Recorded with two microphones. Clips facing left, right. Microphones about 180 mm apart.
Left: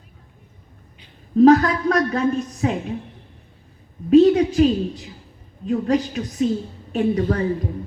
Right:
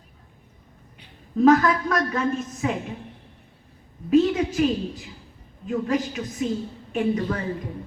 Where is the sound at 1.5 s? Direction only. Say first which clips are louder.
Left 2 dB; 35° left (ahead or behind).